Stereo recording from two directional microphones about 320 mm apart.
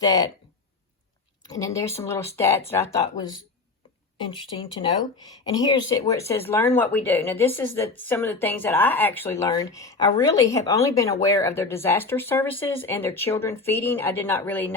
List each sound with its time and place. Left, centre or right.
0.0 s speech: centre
1.5 s speech: centre
5.3 s speech: centre